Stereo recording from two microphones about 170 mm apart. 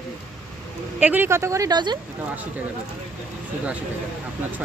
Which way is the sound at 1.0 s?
10° right (ahead or behind).